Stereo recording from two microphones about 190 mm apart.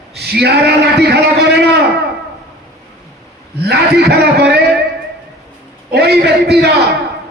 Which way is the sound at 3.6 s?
60° right (ahead or behind).